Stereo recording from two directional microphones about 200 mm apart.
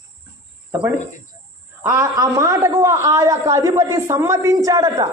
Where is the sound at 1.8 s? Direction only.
15° right (ahead or behind).